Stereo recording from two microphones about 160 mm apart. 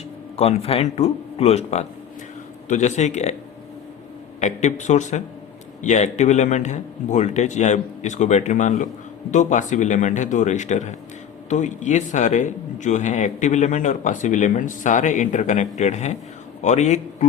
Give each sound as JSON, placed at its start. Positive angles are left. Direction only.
{"t": 0.3, "sound": "speech", "side_deg": 40}
{"t": 4.4, "sound": "speech", "side_deg": 45}